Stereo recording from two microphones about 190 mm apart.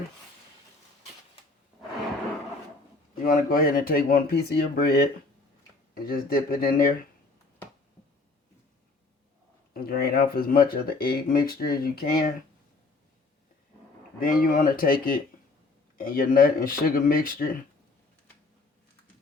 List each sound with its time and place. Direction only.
3.2 s speech: 50° left (ahead or behind)
9.7 s speech: 50° left (ahead or behind)
14.2 s speech: 45° left (ahead or behind)